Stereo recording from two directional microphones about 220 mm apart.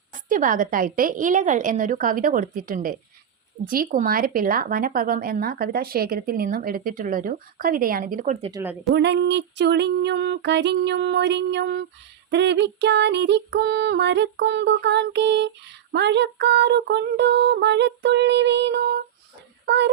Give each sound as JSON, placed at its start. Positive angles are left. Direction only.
{"t": 0.1, "sound": "speech", "side_deg": -35}
{"t": 9.0, "sound": "music", "side_deg": -50}
{"t": 19.6, "sound": "a child's voice", "side_deg": -50}